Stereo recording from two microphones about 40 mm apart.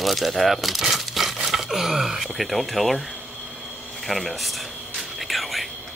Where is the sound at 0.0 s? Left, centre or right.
Centre.